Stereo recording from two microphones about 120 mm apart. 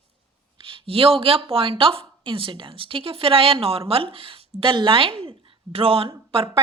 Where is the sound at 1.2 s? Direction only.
50° right (ahead or behind).